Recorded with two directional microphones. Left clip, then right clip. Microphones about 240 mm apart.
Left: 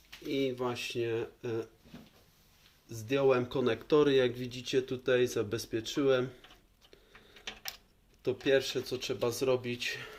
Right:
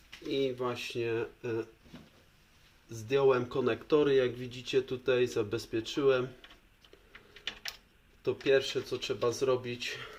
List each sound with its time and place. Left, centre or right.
0.3 s speech: centre
2.9 s speech: centre
8.2 s speech: left